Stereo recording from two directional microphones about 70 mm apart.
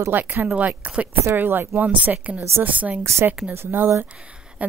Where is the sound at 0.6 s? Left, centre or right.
Centre.